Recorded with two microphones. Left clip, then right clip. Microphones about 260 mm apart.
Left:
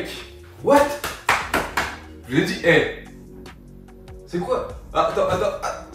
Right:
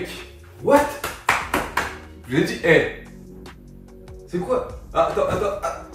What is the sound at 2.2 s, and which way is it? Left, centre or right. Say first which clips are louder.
Speech: even; centre.